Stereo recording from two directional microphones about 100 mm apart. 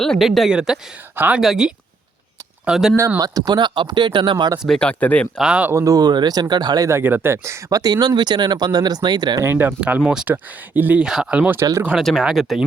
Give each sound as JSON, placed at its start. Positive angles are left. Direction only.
{"t": 0.0, "sound": "speech", "side_deg": 0}
{"t": 1.1, "sound": "speech", "side_deg": -20}
{"t": 1.4, "sound": "speech", "side_deg": -5}
{"t": 3.2, "sound": "speech", "side_deg": -40}
{"t": 4.6, "sound": "speech", "side_deg": 5}
{"t": 5.4, "sound": "speech", "side_deg": -10}
{"t": 5.7, "sound": "speech", "side_deg": -35}
{"t": 6.8, "sound": "speech", "side_deg": -25}
{"t": 9.4, "sound": "speech", "side_deg": -20}
{"t": 10.1, "sound": "speech", "side_deg": -10}
{"t": 12.0, "sound": "speech", "side_deg": -5}